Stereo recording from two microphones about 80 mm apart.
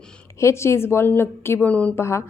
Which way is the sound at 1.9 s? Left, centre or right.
Left.